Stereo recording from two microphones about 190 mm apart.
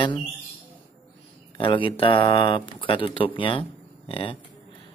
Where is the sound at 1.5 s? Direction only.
25° left (ahead or behind).